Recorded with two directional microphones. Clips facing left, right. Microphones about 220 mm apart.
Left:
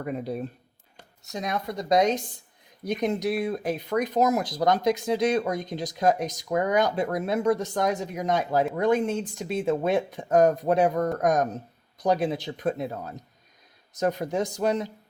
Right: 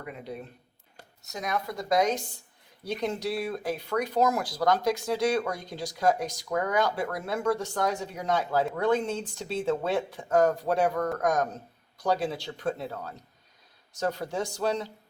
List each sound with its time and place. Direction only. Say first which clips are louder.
0.0 s speech: left 8 dB; 40° left (ahead or behind)
1.3 s speech: left 2 dB; 25° left (ahead or behind)